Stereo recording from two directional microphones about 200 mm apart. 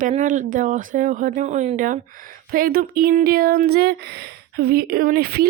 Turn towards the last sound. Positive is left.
turn(degrees=-50)  # may be behind; listen again after turning